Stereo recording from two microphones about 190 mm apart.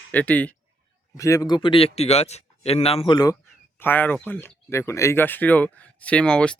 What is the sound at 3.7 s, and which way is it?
Speech, 10° left (ahead or behind).